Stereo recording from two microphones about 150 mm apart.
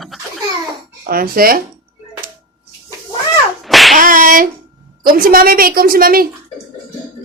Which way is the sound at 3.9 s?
65° right (ahead or behind).